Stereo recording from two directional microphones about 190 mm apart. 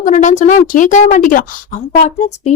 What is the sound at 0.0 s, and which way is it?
A woman's voice, 40° left (ahead or behind).